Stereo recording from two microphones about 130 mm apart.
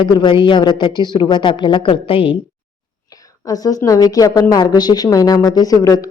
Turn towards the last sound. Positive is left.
turn(degrees=25)  # may be behind; listen again after turning